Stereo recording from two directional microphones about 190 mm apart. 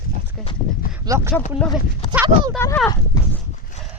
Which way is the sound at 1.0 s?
15° right (ahead or behind).